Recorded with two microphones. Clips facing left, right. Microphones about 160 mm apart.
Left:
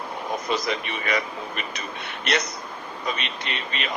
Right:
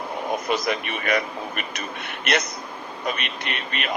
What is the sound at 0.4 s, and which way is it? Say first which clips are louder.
Speech: right 2 dB; 55° right (ahead or behind).